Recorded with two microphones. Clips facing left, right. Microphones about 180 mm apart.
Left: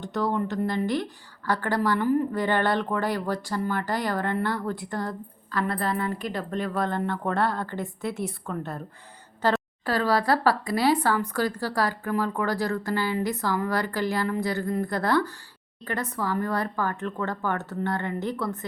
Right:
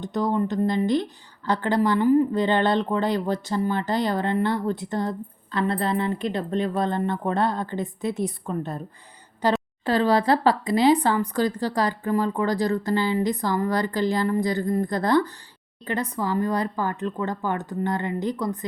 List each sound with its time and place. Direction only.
0.0 s speech: 20° right (ahead or behind)